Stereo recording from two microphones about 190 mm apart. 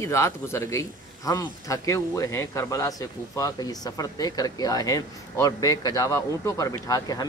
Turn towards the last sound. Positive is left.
turn(degrees=20)  # may be behind; listen again after turning